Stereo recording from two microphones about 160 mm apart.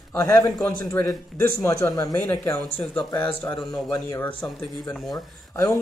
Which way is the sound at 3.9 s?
20° left (ahead or behind).